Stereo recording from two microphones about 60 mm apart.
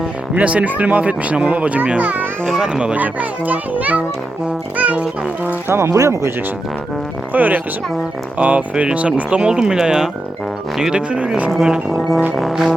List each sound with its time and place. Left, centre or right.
0.3 s a child's voice: right
2.5 s speech: centre
2.9 s a child's voice: right
5.6 s speech: right
7.3 s a child's voice: right
11.5 s speech: centre
12.3 s music: centre